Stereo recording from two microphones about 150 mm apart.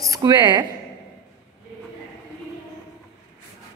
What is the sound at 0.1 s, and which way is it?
Speech, 30° right (ahead or behind).